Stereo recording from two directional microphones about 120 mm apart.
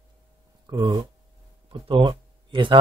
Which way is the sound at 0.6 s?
35° right (ahead or behind).